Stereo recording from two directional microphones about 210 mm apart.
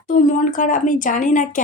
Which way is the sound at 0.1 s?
35° left (ahead or behind).